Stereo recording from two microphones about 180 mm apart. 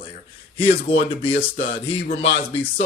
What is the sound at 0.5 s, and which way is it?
A man's voice, 30° left (ahead or behind).